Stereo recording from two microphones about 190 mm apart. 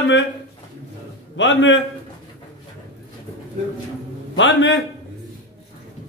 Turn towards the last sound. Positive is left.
turn(degrees=75)  # may be behind; listen again after turning